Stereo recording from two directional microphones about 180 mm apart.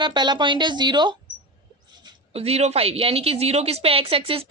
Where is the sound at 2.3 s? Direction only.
35° right (ahead or behind).